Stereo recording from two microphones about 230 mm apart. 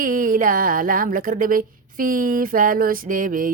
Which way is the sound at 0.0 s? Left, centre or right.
Right.